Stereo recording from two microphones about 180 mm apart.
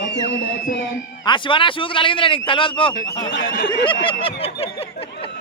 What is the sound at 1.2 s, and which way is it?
Speech, 25° left (ahead or behind).